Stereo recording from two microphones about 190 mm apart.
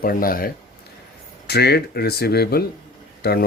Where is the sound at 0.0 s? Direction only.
50° left (ahead or behind).